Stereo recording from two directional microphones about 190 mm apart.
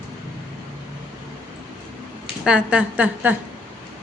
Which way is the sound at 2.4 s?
5° right (ahead or behind).